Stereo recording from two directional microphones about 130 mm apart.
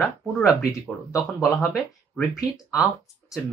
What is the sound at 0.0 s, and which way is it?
Speech, 5° right (ahead or behind).